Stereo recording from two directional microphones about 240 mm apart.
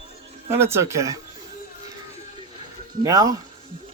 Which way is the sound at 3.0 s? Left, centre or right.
Centre.